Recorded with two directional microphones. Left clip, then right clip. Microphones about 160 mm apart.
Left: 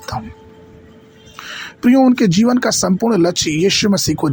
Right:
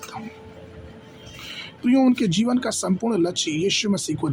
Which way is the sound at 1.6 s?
45° left (ahead or behind).